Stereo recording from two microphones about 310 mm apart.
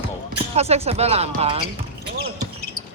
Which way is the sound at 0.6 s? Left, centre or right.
Centre.